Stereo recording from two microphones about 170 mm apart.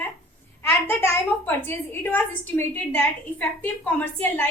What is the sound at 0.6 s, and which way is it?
A woman's voice, 15° left (ahead or behind).